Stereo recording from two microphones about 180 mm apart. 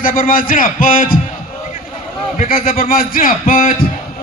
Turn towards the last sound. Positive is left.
turn(degrees=50)  # may be behind; listen again after turning